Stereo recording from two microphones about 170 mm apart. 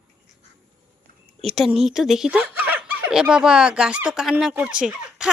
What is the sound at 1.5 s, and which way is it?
A woman's voice, centre (ahead or behind).